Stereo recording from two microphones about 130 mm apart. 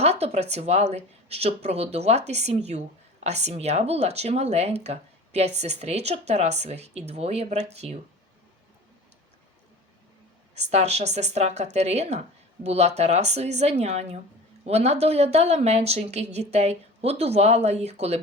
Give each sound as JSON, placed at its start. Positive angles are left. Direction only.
{"t": 0.0, "sound": "speech", "side_deg": -55}
{"t": 10.5, "sound": "speech", "side_deg": -55}